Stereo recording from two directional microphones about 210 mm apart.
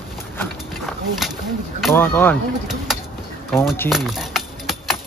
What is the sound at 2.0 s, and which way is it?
Speech, 10° left (ahead or behind).